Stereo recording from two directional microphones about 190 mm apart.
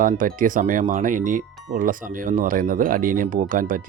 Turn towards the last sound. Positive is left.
turn(degrees=-45)  # may be behind; listen again after turning